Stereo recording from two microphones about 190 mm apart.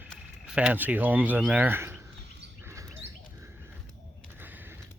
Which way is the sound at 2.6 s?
15° right (ahead or behind).